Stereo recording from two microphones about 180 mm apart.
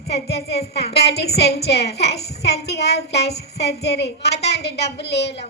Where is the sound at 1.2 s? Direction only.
65° left (ahead or behind).